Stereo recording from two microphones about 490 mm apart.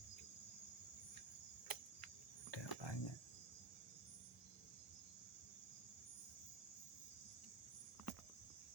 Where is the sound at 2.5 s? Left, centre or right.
Left.